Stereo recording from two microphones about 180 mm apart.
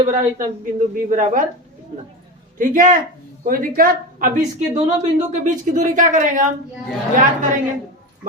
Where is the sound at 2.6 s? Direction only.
50° right (ahead or behind).